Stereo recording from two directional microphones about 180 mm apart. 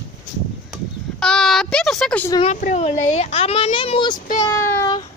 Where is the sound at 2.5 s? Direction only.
40° left (ahead or behind); by 4.1 s 25° left (ahead or behind).